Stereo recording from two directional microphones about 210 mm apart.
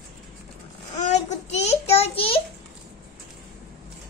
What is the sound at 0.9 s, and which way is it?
Child singing, 35° left (ahead or behind).